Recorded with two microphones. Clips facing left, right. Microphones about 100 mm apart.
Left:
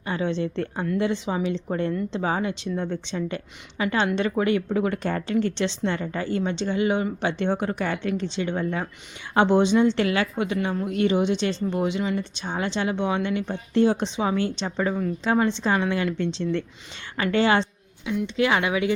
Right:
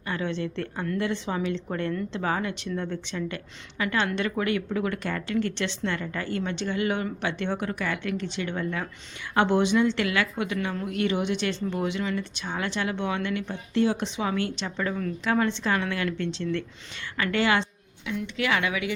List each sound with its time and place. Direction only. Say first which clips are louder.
0.1 s a woman's voice: left 4 dB; 20° left (ahead or behind)